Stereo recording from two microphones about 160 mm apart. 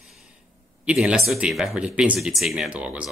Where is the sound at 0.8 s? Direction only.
5° right (ahead or behind).